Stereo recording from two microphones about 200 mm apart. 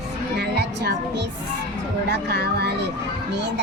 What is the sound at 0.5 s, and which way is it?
Music, 55° right (ahead or behind).